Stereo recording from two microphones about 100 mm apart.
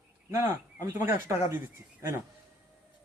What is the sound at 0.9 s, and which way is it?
A woman's voice, 25° right (ahead or behind).